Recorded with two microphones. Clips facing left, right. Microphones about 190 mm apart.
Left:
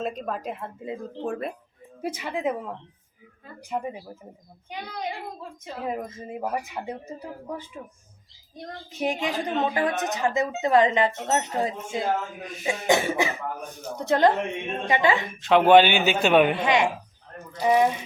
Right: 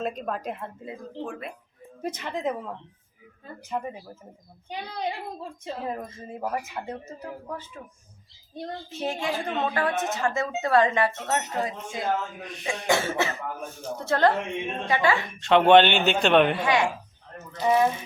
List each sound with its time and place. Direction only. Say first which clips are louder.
0.0 s a man's voice: even; centre (ahead or behind)
1.2 s speech: left 5 dB; 40° left (ahead or behind)
2.0 s speech: left 1 dB; 10° left (ahead or behind)
5.8 s speech: left 5 dB; 15° left (ahead or behind)
8.9 s speech: left 3 dB; 15° left (ahead or behind)
12.4 s a man's voice: left 2 dB; centre (ahead or behind)
12.9 s speech: left 2 dB; 15° left (ahead or behind)
15.4 s a man's voice: left 1 dB; centre (ahead or behind)
16.6 s speech: left 1 dB; 20° left (ahead or behind)